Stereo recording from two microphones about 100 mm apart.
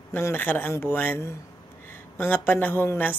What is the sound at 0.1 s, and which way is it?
Speech, 20° left (ahead or behind).